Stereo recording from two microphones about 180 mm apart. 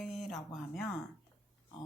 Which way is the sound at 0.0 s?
Centre (ahead or behind).